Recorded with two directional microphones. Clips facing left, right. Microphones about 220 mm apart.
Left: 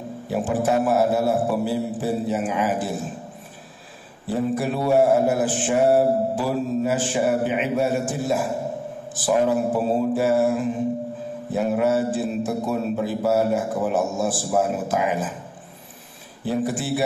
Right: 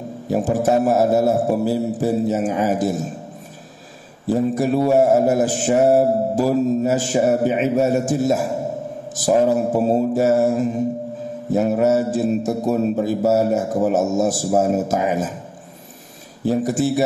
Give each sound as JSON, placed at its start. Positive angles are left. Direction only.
{"t": 0.3, "sound": "mantra", "side_deg": -40}
{"t": 4.3, "sound": "mantra", "side_deg": -40}
{"t": 16.4, "sound": "mantra", "side_deg": -40}